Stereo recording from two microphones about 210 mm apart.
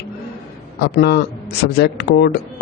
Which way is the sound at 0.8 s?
50° left (ahead or behind).